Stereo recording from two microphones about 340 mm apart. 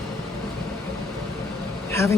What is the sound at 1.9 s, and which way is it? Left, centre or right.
Speech, centre.